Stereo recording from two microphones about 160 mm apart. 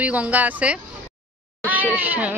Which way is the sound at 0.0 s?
10° right (ahead or behind).